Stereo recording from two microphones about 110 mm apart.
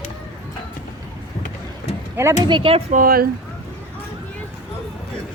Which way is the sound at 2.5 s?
50° right (ahead or behind).